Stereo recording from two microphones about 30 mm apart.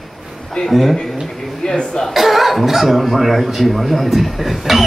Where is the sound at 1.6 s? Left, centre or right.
Left.